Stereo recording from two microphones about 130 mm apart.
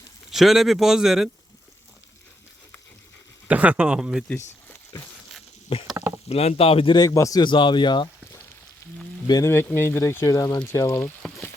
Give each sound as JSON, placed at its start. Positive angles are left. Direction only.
{"t": 0.3, "sound": "speech", "side_deg": 0}
{"t": 3.5, "sound": "speech", "side_deg": -10}
{"t": 4.9, "sound": "speech", "side_deg": 25}
{"t": 5.9, "sound": "speech", "side_deg": -10}
{"t": 6.2, "sound": "speech", "side_deg": 50}
{"t": 9.2, "sound": "speech", "side_deg": 30}
{"t": 9.5, "sound": "speech", "side_deg": 20}